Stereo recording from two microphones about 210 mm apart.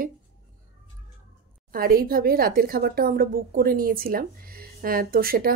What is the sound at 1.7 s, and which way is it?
A woman's voice, 45° right (ahead or behind).